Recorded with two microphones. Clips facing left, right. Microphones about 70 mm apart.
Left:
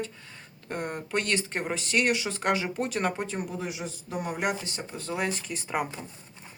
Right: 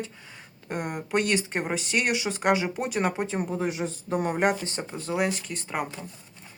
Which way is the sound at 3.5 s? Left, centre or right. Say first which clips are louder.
Right 6 dB; right.